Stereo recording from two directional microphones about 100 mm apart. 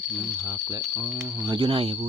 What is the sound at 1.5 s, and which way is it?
Speech, 70° right (ahead or behind).